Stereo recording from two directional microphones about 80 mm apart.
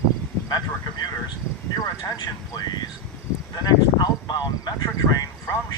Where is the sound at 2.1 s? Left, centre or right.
Left.